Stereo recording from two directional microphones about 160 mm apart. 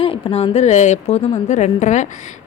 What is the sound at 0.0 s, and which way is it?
A woman's voice, 35° left (ahead or behind).